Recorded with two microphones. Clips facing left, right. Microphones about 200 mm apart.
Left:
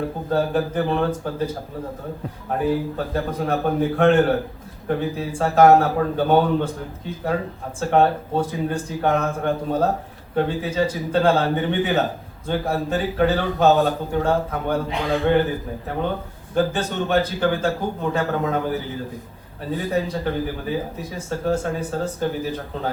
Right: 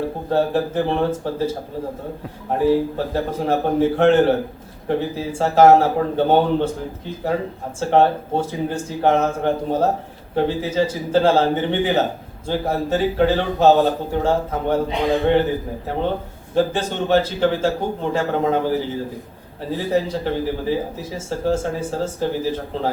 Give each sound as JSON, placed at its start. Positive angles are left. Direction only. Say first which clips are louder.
{"t": 0.3, "sound": "a man's voice", "louder": "right 2 dB", "side_deg": -30}
{"t": 2.5, "sound": "a man's voice", "louder": "right 5 dB", "side_deg": -30}
{"t": 7.8, "sound": "a man's voice", "louder": "right 2 dB", "side_deg": -30}
{"t": 16.6, "sound": "a man's voice", "louder": "right 2 dB", "side_deg": -25}